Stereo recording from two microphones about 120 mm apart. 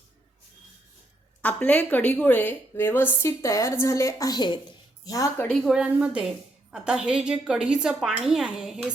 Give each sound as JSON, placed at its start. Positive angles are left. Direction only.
{"t": 1.4, "sound": "a woman's voice", "side_deg": 10}
{"t": 5.6, "sound": "a woman's voice", "side_deg": -5}